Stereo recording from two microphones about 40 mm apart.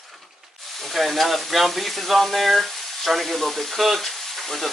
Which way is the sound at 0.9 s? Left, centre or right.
Centre.